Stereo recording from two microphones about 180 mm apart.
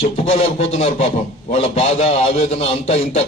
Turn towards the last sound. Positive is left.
turn(degrees=35)  # may be behind; listen again after turning